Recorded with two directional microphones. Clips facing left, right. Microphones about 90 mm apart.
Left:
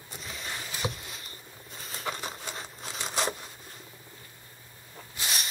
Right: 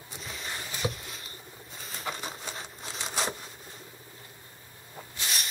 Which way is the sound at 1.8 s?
Centre (ahead or behind).